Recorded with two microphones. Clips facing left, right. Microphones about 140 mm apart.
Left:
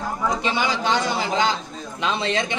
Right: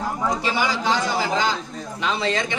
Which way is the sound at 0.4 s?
20° left (ahead or behind).